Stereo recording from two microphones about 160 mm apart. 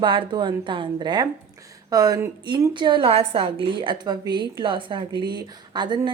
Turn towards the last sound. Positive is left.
turn(degrees=-30)  # may be behind; listen again after turning